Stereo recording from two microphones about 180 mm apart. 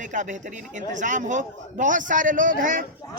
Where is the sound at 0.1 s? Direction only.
45° right (ahead or behind).